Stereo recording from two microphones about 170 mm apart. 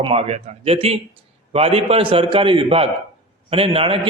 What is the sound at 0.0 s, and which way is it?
A man's voice, 35° right (ahead or behind).